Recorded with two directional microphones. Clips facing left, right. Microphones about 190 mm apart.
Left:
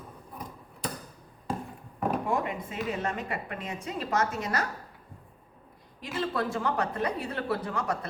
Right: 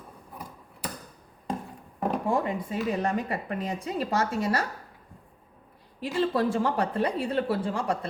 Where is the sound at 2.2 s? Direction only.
30° right (ahead or behind).